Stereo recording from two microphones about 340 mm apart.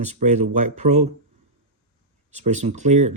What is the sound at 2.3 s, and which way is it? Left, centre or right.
Speech, centre.